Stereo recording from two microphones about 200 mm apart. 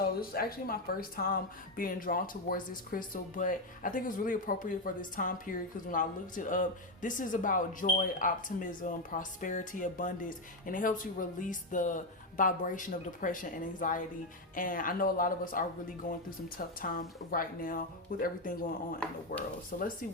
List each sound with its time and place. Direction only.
0.2 s a woman's voice: 50° left (ahead or behind)